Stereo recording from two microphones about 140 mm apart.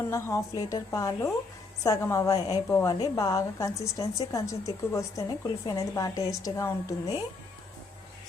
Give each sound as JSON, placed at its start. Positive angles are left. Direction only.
{"t": 0.1, "sound": "a woman's voice", "side_deg": 20}